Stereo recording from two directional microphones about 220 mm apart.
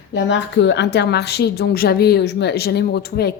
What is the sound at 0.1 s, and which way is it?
A woman's voice, 55° left (ahead or behind).